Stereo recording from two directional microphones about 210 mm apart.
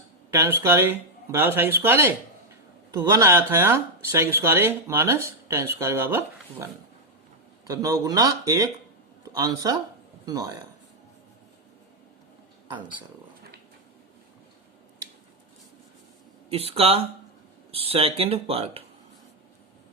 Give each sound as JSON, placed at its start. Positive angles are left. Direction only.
{"t": 0.3, "sound": "speech", "side_deg": -15}
{"t": 7.7, "sound": "speech", "side_deg": -15}
{"t": 16.5, "sound": "speech", "side_deg": -30}